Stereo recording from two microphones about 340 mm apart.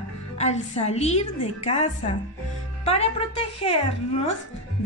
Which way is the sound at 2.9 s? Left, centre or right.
Centre.